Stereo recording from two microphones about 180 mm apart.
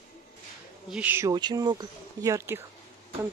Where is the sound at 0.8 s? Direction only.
10° right (ahead or behind).